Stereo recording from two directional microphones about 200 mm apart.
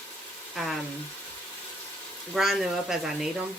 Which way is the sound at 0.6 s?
Centre (ahead or behind).